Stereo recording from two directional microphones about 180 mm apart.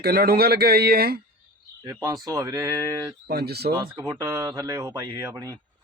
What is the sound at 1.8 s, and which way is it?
Speech, 20° right (ahead or behind).